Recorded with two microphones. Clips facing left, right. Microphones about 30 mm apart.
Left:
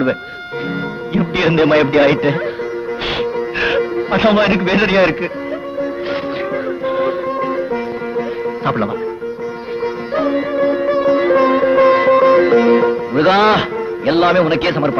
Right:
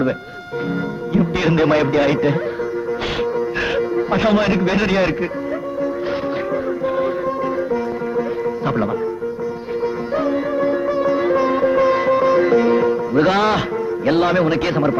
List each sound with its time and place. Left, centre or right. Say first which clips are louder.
1.1 s speech: left 2 dB; left
3.2 s music: left 2 dB; left
6.8 s music: left 4 dB; left
9.8 s music: left 2 dB; left